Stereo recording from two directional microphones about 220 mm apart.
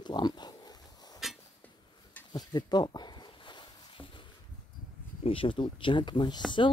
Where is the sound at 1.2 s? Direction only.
Centre (ahead or behind).